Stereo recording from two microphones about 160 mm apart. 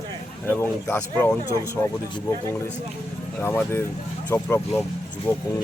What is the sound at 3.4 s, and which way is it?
Speech, 15° left (ahead or behind).